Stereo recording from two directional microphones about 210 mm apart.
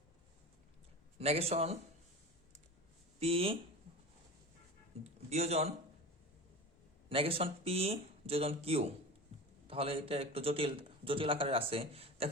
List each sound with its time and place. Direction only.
1.2 s a man's voice: 30° right (ahead or behind)
3.2 s speech: 30° right (ahead or behind)
5.3 s a man's voice: 30° right (ahead or behind)
7.1 s a man's voice: 25° right (ahead or behind)